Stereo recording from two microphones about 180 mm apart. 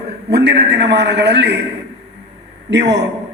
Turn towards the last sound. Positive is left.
turn(degrees=-75)  # may be behind; listen again after turning